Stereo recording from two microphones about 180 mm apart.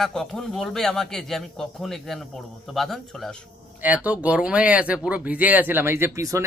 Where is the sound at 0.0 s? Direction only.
Centre (ahead or behind).